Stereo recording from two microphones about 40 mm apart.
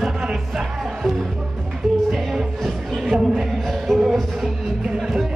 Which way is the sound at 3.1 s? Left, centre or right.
Centre.